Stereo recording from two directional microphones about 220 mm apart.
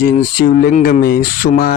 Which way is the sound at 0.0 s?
40° left (ahead or behind).